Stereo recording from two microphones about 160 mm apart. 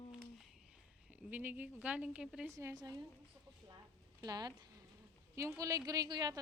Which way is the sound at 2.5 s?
25° right (ahead or behind).